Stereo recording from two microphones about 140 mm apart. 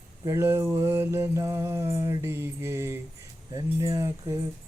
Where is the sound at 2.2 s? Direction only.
20° right (ahead or behind).